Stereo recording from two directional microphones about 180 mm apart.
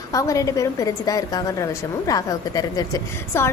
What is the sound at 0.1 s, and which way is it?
A woman's voice, 20° left (ahead or behind).